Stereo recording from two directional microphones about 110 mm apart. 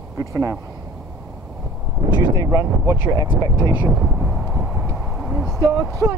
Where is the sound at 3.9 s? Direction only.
5° right (ahead or behind).